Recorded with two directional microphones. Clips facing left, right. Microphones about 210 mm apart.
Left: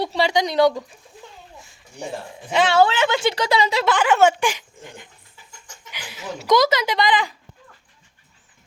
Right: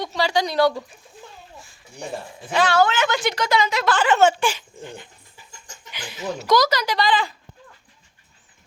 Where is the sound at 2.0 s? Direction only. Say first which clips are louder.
Left 1 dB; 25° left (ahead or behind).